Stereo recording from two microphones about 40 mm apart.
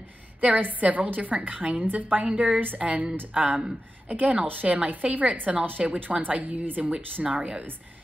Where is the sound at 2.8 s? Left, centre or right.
Right.